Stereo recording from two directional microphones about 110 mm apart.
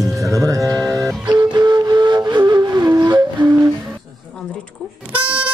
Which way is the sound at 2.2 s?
40° right (ahead or behind).